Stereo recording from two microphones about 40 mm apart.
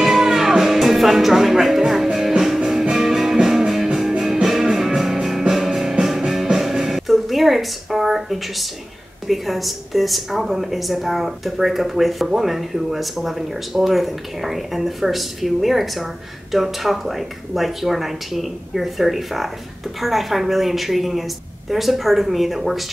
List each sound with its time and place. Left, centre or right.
0.0 s music: centre
9.3 s speech: centre